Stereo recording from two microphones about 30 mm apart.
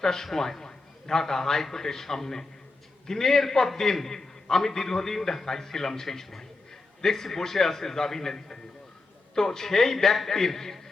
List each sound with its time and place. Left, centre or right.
0.0 s a man's voice: centre